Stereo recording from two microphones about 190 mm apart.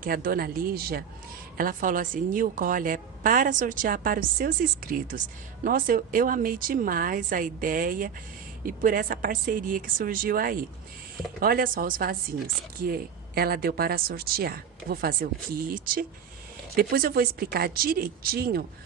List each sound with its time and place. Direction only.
0.0 s a woman's voice: 50° right (ahead or behind)